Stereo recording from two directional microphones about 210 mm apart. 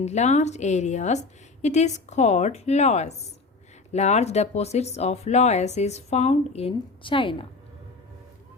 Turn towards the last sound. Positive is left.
turn(degrees=25)  # may be behind; listen again after turning